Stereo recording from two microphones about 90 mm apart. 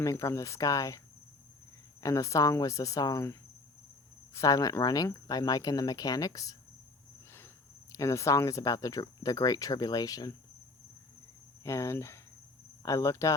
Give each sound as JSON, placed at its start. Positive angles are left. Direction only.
{"t": 0.0, "sound": "speech", "side_deg": 35}
{"t": 4.4, "sound": "speech", "side_deg": 40}
{"t": 7.9, "sound": "speech", "side_deg": 35}
{"t": 11.6, "sound": "speech", "side_deg": 30}